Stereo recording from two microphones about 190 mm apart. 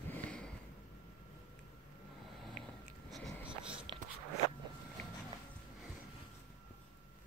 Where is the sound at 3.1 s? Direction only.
Centre (ahead or behind).